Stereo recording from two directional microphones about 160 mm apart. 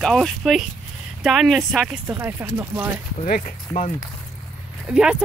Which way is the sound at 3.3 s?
60° left (ahead or behind).